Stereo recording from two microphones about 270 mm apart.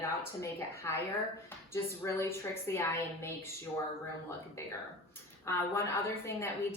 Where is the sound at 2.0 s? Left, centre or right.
Centre.